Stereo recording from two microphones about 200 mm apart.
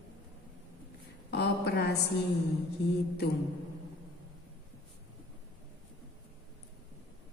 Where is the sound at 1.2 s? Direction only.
55° left (ahead or behind).